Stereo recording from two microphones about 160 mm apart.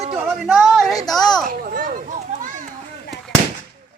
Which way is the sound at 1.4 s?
60° right (ahead or behind).